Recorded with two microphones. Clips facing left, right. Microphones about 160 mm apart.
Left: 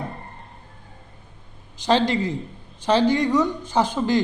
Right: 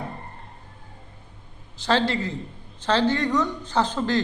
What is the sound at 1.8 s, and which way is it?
A man's voice, 15° left (ahead or behind).